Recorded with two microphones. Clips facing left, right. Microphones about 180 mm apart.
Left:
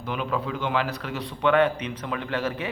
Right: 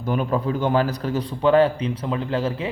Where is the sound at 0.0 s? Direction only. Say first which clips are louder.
Right 6 dB; 40° right (ahead or behind).